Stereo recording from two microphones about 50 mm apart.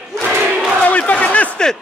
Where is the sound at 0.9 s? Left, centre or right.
Left.